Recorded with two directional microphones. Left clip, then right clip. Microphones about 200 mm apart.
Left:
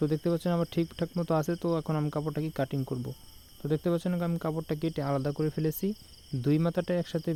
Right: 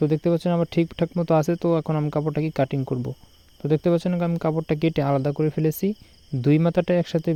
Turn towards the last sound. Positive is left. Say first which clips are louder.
# right 9 dB
turn(degrees=-30)  # may be behind; listen again after turning